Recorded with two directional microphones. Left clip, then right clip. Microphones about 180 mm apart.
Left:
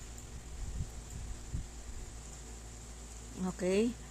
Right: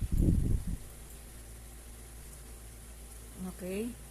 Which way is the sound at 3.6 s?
20° left (ahead or behind).